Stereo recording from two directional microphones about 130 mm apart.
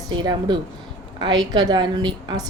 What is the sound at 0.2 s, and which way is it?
Speech, 35° right (ahead or behind).